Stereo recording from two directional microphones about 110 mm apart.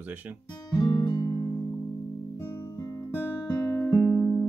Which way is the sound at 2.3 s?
20° left (ahead or behind).